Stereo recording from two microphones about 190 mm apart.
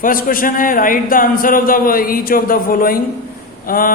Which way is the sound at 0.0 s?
45° left (ahead or behind).